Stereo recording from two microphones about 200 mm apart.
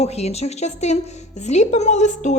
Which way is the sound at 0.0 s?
30° left (ahead or behind).